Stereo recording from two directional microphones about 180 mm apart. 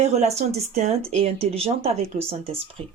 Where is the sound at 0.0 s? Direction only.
40° right (ahead or behind).